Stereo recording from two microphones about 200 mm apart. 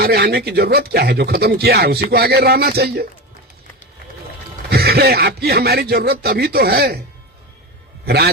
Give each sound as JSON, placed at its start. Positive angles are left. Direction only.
{"t": 0.0, "sound": "speech", "side_deg": -50}
{"t": 4.7, "sound": "speech", "side_deg": -50}
{"t": 8.0, "sound": "a man's voice", "side_deg": -50}